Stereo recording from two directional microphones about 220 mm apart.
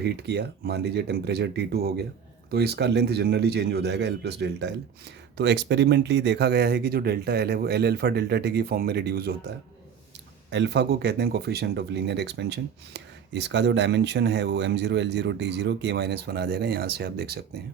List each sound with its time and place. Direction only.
0.0 s speech: 50° right (ahead or behind)
10.5 s speech: 50° right (ahead or behind)